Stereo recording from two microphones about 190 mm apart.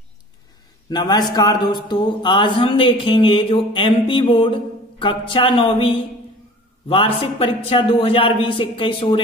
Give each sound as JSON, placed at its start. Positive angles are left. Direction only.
{"t": 0.8, "sound": "a man's voice", "side_deg": 20}